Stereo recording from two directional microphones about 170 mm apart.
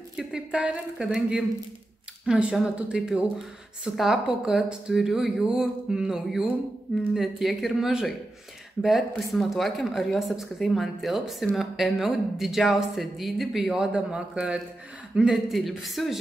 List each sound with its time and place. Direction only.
0.1 s speech: 5° right (ahead or behind)